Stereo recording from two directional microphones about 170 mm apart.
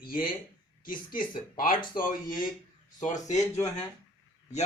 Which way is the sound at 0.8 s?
55° left (ahead or behind).